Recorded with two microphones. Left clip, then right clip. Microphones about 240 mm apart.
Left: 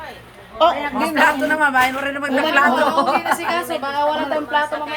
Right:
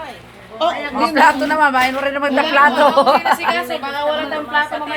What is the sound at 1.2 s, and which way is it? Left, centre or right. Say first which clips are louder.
A man's voice: right 3 dB; centre.